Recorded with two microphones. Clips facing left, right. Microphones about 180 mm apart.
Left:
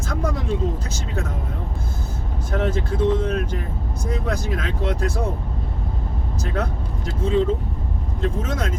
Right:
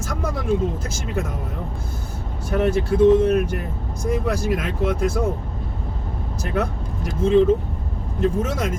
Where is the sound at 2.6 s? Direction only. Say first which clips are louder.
Right 4 dB; 10° right (ahead or behind).